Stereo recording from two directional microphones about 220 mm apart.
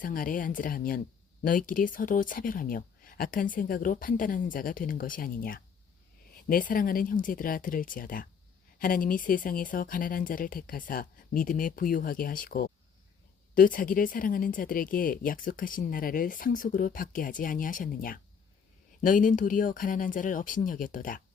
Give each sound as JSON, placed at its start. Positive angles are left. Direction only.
{"t": 0.0, "sound": "speech", "side_deg": 40}